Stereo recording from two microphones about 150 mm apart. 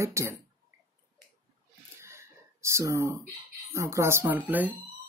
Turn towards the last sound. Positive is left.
turn(degrees=-10)  # may be behind; listen again after turning